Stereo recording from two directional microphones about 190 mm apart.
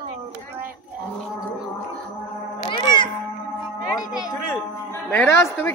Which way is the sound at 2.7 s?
25° left (ahead or behind).